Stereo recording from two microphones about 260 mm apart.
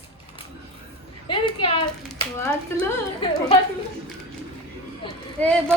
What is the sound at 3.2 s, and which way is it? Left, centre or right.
Speech, centre.